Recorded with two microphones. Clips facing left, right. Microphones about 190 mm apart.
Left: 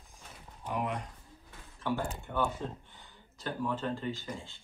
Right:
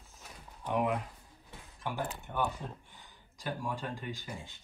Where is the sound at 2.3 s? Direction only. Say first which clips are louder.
Left 2 dB; 15° right (ahead or behind).